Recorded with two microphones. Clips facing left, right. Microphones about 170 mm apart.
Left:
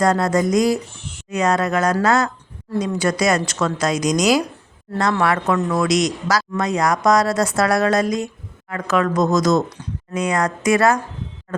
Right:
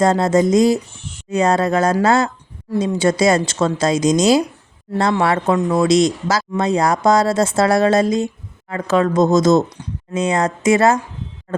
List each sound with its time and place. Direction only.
0.0 s speech: 25° right (ahead or behind)